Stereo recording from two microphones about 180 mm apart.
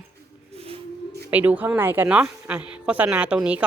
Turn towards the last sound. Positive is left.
turn(degrees=-5)  # may be behind; listen again after turning